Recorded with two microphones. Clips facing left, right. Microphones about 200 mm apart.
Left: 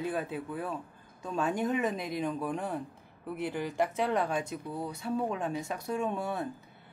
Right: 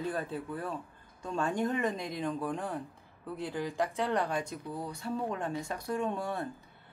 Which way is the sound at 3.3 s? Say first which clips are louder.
Left 2 dB; 20° left (ahead or behind).